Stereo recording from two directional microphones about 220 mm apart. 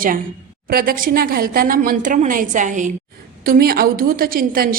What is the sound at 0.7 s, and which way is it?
A woman's voice, 40° right (ahead or behind).